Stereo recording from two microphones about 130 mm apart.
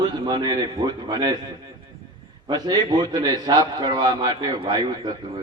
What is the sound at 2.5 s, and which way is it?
A man's voice, 30° right (ahead or behind).